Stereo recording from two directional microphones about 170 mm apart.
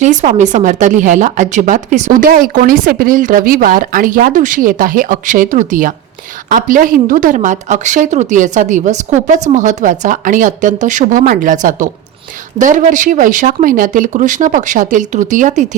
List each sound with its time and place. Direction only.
0.0 s speech: 45° right (ahead or behind)